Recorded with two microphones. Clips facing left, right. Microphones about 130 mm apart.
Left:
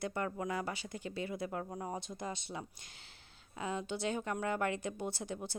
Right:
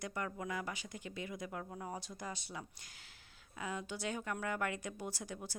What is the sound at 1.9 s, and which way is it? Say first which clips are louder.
Speech: left 4 dB; 25° left (ahead or behind).